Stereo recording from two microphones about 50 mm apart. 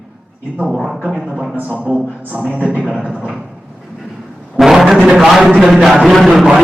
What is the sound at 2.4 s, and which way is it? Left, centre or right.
Speech, right.